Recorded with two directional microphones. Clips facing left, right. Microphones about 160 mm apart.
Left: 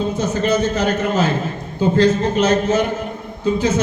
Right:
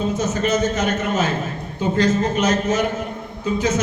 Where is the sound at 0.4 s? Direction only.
30° left (ahead or behind).